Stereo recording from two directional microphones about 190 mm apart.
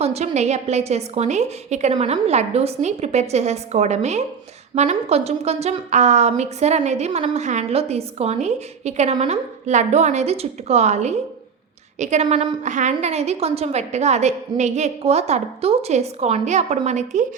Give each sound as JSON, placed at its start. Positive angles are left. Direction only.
{"t": 0.0, "sound": "a woman's voice", "side_deg": -35}